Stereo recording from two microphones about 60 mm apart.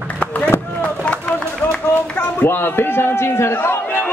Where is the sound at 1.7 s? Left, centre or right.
Left.